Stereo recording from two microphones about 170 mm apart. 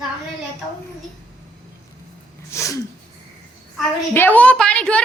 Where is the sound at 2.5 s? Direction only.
20° left (ahead or behind).